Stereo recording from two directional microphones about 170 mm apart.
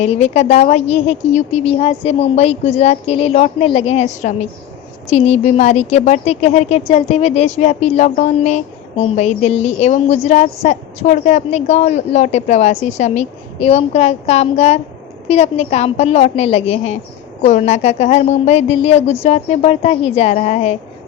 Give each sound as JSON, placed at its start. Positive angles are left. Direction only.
{"t": 0.0, "sound": "speech", "side_deg": 40}